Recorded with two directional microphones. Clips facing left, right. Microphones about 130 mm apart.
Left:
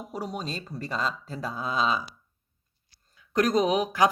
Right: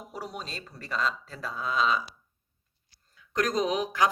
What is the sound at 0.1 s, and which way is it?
Speech, 20° left (ahead or behind).